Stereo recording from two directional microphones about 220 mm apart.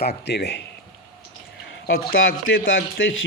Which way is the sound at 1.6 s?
65° left (ahead or behind).